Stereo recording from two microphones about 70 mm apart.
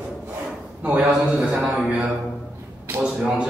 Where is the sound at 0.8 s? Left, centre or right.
Centre.